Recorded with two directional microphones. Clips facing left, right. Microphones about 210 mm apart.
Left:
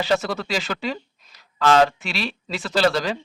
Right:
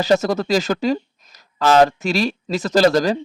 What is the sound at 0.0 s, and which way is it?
A man's voice, 40° right (ahead or behind).